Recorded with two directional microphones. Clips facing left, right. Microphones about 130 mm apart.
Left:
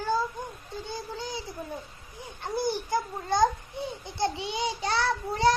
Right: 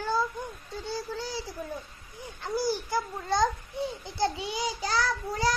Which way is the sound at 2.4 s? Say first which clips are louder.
Even; 20° left (ahead or behind).